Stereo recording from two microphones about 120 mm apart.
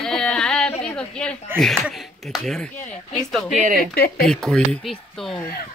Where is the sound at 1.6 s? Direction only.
Centre (ahead or behind).